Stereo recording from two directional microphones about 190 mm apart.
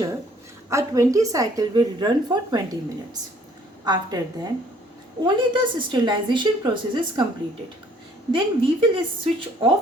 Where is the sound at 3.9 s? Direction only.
20° right (ahead or behind).